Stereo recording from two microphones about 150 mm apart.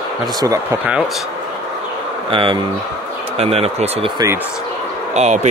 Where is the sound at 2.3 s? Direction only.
35° right (ahead or behind).